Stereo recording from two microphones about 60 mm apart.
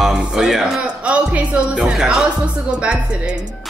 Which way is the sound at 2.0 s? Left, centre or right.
Centre.